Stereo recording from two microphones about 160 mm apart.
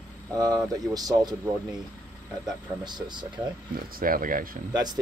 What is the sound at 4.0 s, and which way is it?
Speech, 60° right (ahead or behind).